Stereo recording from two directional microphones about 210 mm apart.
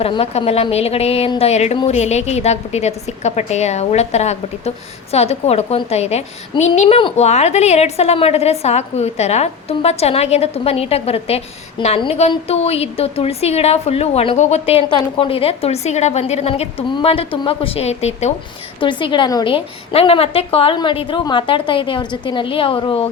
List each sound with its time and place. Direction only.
0.0 s a woman's voice: 30° left (ahead or behind)